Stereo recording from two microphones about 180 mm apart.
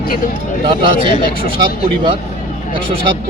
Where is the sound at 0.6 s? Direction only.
25° right (ahead or behind).